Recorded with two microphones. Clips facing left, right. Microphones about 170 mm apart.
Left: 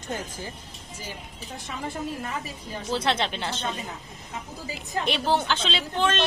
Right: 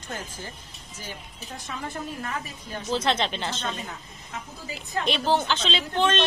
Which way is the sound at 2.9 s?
10° left (ahead or behind).